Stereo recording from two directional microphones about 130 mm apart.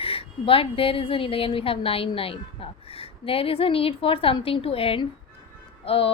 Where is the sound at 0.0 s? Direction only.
45° left (ahead or behind).